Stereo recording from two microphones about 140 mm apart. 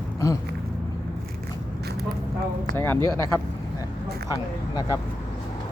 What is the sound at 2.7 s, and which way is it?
Speech, 15° left (ahead or behind).